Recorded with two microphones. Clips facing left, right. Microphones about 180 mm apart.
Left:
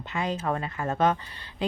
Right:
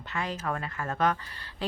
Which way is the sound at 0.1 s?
20° left (ahead or behind).